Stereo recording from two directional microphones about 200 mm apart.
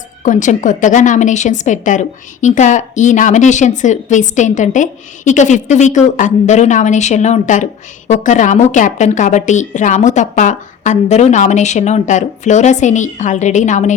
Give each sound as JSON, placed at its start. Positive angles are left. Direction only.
{"t": 0.2, "sound": "a woman's voice", "side_deg": 40}